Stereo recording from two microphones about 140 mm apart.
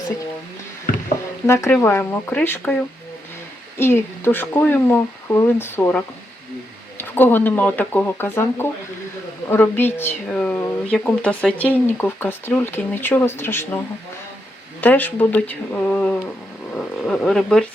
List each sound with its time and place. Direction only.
1.5 s speech: 20° left (ahead or behind)
3.8 s speech: 15° left (ahead or behind)
14.8 s speech: 10° left (ahead or behind)
16.7 s a sound: 5° left (ahead or behind)